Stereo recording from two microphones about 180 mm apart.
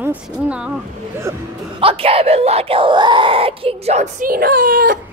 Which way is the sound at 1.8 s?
30° right (ahead or behind).